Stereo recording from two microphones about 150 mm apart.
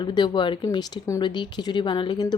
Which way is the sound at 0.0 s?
30° left (ahead or behind).